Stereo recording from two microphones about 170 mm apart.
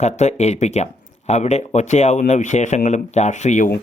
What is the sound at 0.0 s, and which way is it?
Speech, 40° left (ahead or behind).